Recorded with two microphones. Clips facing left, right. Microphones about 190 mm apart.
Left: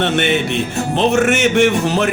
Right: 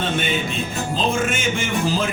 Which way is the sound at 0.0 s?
70° left (ahead or behind).